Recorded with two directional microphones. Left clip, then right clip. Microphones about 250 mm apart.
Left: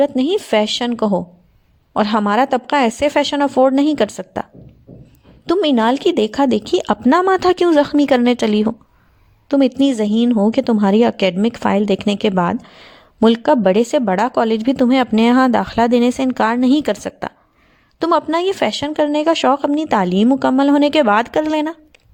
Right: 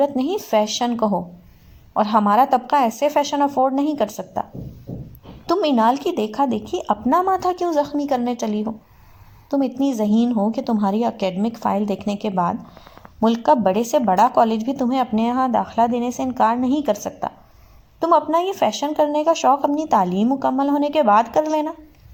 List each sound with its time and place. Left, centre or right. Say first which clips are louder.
0.0 s a woman's voice: left 4 dB; left
5.5 s a woman's voice: left 2 dB; left